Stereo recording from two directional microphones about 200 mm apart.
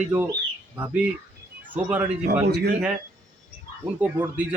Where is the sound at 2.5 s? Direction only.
55° right (ahead or behind).